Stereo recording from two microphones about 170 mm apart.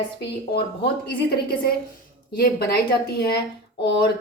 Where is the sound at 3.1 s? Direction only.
70° left (ahead or behind).